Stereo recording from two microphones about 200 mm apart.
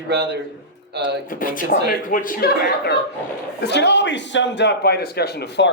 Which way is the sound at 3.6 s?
60° left (ahead or behind).